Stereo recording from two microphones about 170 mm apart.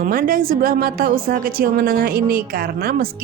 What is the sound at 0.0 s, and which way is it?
A woman's voice, 55° right (ahead or behind).